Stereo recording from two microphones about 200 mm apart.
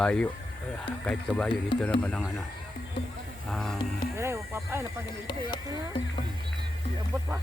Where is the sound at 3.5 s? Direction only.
Centre (ahead or behind).